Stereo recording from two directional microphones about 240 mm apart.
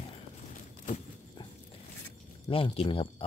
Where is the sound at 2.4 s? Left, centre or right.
Left.